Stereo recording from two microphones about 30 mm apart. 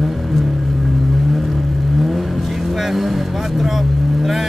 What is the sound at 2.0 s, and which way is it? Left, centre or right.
Vehicle, centre.